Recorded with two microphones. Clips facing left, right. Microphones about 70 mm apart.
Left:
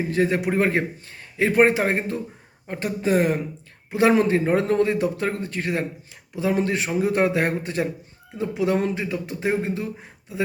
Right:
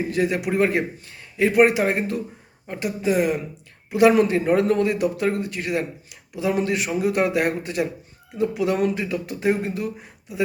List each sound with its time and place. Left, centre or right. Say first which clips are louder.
0.1 s a man's voice: left 3 dB; left